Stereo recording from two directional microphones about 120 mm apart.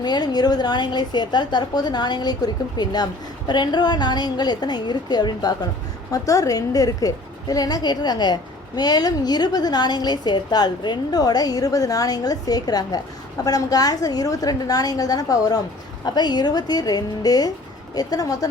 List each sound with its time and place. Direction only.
0.0 s a woman's voice: 35° left (ahead or behind)